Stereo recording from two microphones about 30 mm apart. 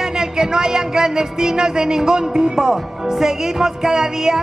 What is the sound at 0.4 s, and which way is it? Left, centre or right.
Speech, right.